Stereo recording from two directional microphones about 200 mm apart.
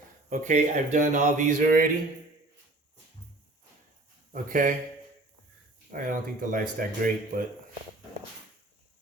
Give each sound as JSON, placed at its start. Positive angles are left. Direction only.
{"t": 0.3, "sound": "speech", "side_deg": -35}
{"t": 4.3, "sound": "speech", "side_deg": -40}
{"t": 5.9, "sound": "speech", "side_deg": -45}